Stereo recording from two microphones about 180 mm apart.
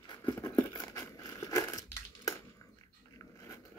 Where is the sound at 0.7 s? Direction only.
20° left (ahead or behind).